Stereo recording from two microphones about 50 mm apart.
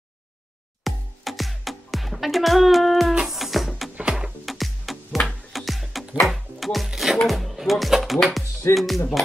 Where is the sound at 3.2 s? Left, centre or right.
Centre.